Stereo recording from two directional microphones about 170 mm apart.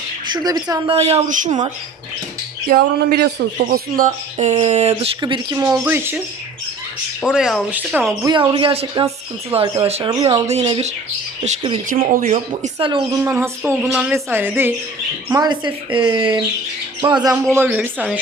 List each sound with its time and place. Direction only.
0.4 s speech: 20° right (ahead or behind)
0.9 s speech: 35° right (ahead or behind)
2.6 s speech: 65° right (ahead or behind); by 4.9 s 40° right (ahead or behind)
5.2 s speech: 25° right (ahead or behind)
5.8 s a woman's voice: 10° right (ahead or behind)
7.3 s speech: 5° right (ahead or behind)
8.2 s speech: 25° right (ahead or behind)
10.4 s speech: 35° right (ahead or behind)
12.1 s speech: 50° right (ahead or behind)
12.8 s speech: 30° right (ahead or behind)
13.2 s a woman's voice: 15° right (ahead or behind)
15.3 s speech: 25° right (ahead or behind)
17.5 s a woman's voice: 10° right (ahead or behind)